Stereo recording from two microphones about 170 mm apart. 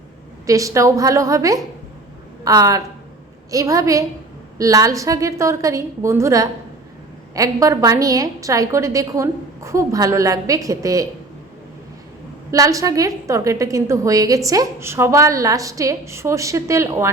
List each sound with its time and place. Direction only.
0.4 s a woman's voice: 20° right (ahead or behind)
12.5 s a woman's voice: 20° right (ahead or behind)